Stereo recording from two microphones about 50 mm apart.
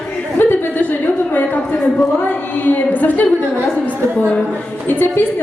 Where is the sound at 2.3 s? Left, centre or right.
Left.